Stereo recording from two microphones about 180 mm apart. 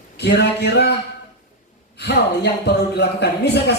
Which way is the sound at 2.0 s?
70° left (ahead or behind).